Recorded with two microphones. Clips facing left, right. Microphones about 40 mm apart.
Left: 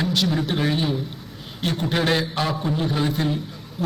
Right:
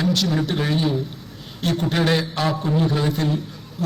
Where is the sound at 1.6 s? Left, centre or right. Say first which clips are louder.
Right 2 dB; centre.